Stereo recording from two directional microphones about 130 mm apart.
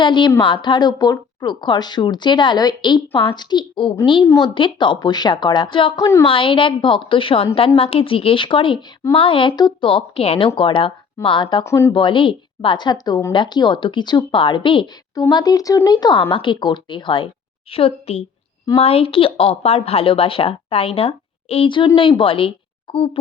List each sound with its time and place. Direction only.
0.0 s a woman's voice: 40° left (ahead or behind)
11.6 s speech: 20° left (ahead or behind)
11.9 s a woman's voice: 40° left (ahead or behind)